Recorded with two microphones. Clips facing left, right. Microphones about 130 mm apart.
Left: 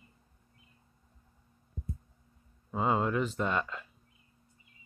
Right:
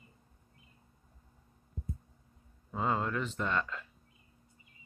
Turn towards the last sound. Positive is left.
turn(degrees=15)  # may be behind; listen again after turning